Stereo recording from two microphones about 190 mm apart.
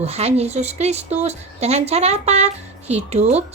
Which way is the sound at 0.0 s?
35° right (ahead or behind).